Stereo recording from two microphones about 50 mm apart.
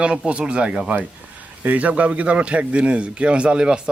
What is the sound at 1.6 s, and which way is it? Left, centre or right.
Speech, right.